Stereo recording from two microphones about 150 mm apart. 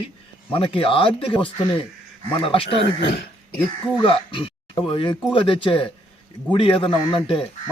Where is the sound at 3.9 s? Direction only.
35° left (ahead or behind).